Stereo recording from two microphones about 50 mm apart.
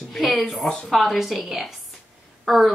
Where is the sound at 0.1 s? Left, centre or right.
Centre.